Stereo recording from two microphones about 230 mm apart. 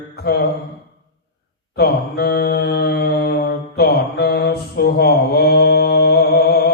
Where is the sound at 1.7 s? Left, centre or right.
Left.